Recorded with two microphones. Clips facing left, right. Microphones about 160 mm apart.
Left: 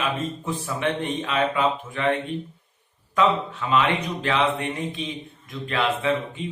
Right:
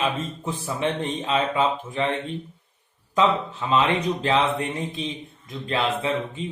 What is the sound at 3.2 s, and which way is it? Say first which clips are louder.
Speech: even; 30° right (ahead or behind).